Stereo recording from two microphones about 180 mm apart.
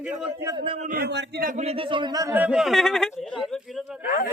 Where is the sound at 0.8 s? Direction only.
55° right (ahead or behind).